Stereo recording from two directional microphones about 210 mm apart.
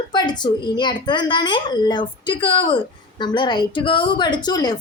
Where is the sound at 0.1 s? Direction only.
20° left (ahead or behind).